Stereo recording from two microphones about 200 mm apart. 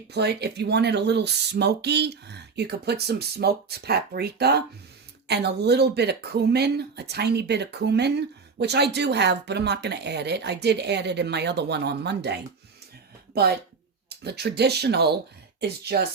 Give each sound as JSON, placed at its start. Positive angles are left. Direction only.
{"t": 0.1, "sound": "a woman's voice", "side_deg": -55}